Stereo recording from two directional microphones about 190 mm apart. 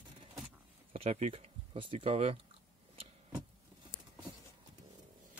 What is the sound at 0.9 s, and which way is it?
Speech, 35° right (ahead or behind).